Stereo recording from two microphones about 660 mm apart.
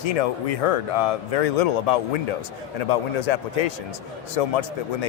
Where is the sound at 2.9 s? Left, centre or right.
Left.